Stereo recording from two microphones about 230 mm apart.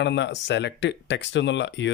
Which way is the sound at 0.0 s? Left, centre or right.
Left.